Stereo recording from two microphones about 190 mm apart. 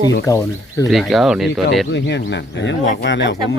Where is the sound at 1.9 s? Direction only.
65° left (ahead or behind).